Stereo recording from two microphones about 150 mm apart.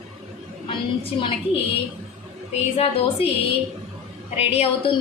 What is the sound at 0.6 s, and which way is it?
A woman's voice, 40° left (ahead or behind).